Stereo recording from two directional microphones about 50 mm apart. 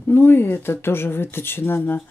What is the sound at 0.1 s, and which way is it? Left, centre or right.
A woman's voice, left.